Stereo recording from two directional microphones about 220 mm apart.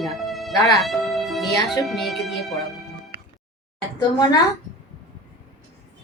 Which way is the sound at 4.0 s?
20° left (ahead or behind).